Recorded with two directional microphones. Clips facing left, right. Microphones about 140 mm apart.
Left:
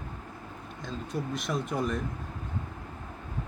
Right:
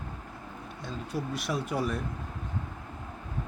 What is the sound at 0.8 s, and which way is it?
Speech, 5° right (ahead or behind).